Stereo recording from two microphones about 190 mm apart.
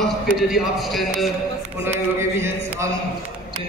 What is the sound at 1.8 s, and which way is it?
A man's voice, 15° right (ahead or behind).